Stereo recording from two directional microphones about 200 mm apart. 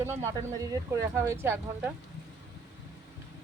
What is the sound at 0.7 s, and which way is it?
Speech, 15° right (ahead or behind).